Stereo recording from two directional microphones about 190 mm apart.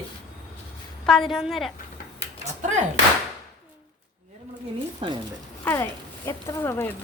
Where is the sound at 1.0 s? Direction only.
Centre (ahead or behind).